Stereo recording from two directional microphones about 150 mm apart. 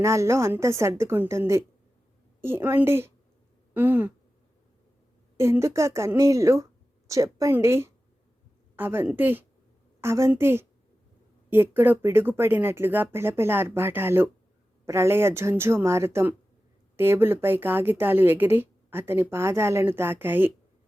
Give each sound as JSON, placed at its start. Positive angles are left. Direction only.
{"t": 0.0, "sound": "a woman's voice", "side_deg": -20}
{"t": 5.4, "sound": "a woman's voice", "side_deg": -20}